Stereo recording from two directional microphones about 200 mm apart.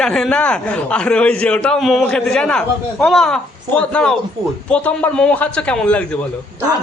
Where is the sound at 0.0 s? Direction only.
5° left (ahead or behind).